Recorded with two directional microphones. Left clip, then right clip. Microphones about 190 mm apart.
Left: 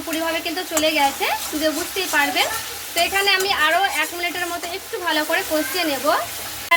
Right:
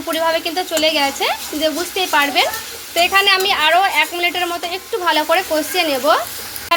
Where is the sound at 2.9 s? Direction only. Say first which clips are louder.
Right 5 dB; 40° right (ahead or behind).